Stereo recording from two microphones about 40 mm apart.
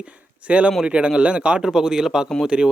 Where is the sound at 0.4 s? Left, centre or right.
Right.